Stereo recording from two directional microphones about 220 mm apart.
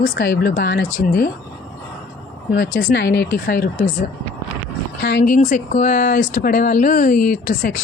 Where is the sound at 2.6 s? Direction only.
45° left (ahead or behind).